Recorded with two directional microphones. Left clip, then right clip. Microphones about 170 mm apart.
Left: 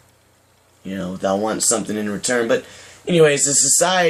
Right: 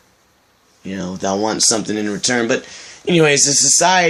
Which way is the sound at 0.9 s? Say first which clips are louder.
Even; 35° right (ahead or behind).